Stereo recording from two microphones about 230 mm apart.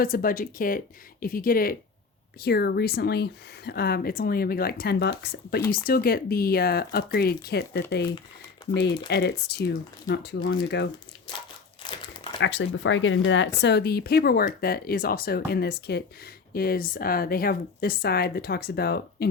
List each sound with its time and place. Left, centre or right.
0.0 s speech: left
11.8 s crumpling: left
12.4 s speech: left